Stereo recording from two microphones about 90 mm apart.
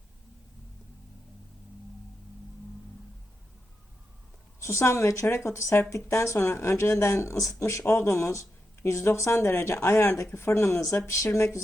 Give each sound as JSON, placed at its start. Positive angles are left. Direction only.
{"t": 4.6, "sound": "speech", "side_deg": 35}